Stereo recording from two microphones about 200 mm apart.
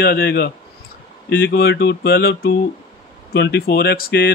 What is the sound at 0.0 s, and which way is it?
Speech, 50° left (ahead or behind).